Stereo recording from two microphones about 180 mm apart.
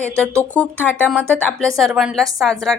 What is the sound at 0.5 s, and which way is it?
A woman's voice, 10° left (ahead or behind).